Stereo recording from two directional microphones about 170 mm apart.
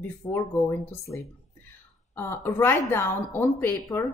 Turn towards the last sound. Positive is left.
turn(degrees=15)  # may be behind; listen again after turning